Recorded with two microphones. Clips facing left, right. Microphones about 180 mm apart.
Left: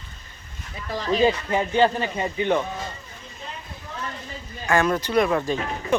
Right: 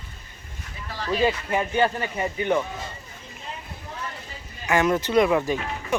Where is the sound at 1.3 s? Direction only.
35° left (ahead or behind).